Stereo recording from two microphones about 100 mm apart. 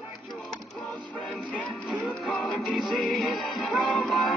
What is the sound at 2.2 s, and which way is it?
Music, centre (ahead or behind).